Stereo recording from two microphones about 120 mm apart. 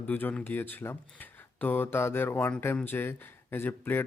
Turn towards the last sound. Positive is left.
turn(degrees=15)  # may be behind; listen again after turning